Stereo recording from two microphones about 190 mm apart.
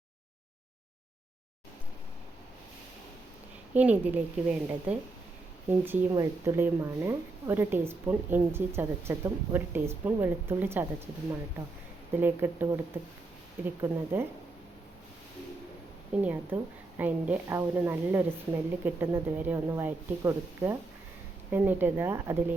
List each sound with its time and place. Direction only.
3.8 s speech: 10° right (ahead or behind)
12.1 s speech: 10° right (ahead or behind)
16.2 s speech: 10° right (ahead or behind)